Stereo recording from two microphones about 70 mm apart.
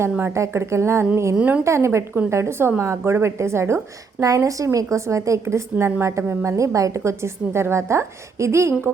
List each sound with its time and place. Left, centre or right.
0.3 s a woman's voice: right
1.4 s a woman's voice: centre
1.6 s a woman's voice: right
4.2 s a woman's voice: right